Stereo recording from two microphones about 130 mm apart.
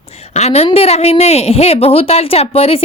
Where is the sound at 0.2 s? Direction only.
55° left (ahead or behind).